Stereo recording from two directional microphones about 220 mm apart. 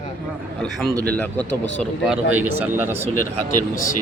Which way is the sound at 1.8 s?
5° right (ahead or behind).